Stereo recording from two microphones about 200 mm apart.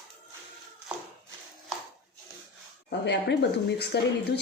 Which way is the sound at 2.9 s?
60° left (ahead or behind).